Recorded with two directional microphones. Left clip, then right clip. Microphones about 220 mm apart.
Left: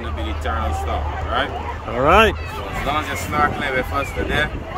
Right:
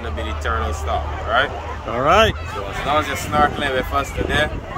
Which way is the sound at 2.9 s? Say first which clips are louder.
Right 3 dB; 25° right (ahead or behind).